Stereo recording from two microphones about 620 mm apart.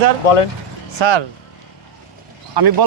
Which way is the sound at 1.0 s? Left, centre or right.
Right.